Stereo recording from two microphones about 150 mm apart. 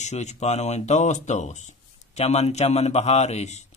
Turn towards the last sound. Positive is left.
turn(degrees=50)  # may be behind; listen again after turning